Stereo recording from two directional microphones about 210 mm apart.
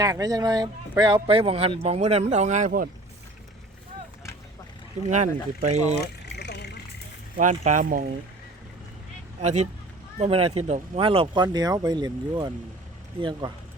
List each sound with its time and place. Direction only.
0.0 s speech: 15° right (ahead or behind); by 2.9 s 40° right (ahead or behind)
5.0 s speech: 35° right (ahead or behind)
6.2 s vehicle: 55° left (ahead or behind)
7.3 s speech: 35° right (ahead or behind)
9.4 s speech: 35° right (ahead or behind)